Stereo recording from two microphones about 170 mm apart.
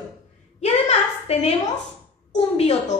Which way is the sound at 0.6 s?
40° left (ahead or behind).